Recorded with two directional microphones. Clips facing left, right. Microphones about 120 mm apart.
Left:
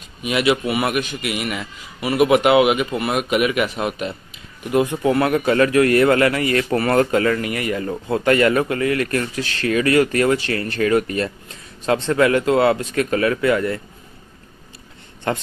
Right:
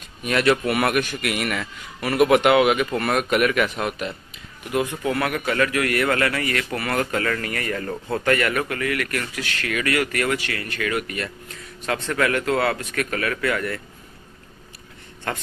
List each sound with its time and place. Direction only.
0.2 s a man's voice: 10° left (ahead or behind)
4.7 s speech: 25° left (ahead or behind)
15.3 s speech: 20° left (ahead or behind)